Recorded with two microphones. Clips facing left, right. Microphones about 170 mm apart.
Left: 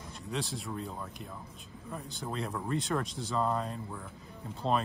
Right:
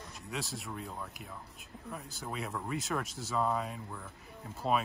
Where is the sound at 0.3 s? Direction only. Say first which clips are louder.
Left 4 dB; centre (ahead or behind).